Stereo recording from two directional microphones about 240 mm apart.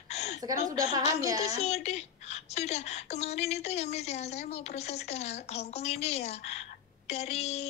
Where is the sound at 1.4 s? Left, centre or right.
Left.